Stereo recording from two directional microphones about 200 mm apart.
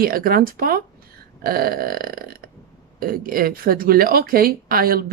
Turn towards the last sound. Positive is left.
turn(degrees=-45)  # may be behind; listen again after turning